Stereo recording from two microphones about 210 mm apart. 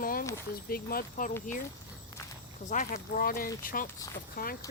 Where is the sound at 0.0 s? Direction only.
45° left (ahead or behind).